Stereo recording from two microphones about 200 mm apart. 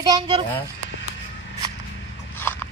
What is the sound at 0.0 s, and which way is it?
Speech, 20° right (ahead or behind).